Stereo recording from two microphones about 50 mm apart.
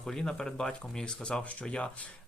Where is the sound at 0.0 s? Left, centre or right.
Centre.